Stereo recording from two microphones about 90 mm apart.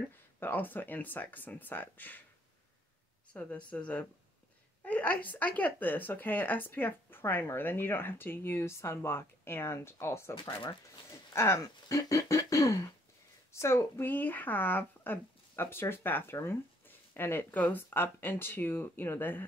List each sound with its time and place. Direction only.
0.4 s speech: 20° left (ahead or behind)
3.3 s speech: 15° left (ahead or behind)